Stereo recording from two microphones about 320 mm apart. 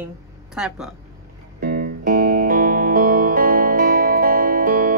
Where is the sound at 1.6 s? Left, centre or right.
Right.